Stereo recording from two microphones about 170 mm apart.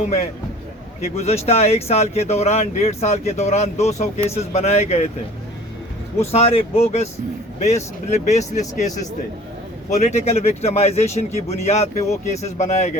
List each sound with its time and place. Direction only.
1.1 s speech: 40° left (ahead or behind)
6.1 s speech: 35° left (ahead or behind)